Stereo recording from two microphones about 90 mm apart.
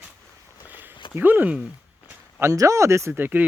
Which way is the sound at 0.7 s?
20° right (ahead or behind).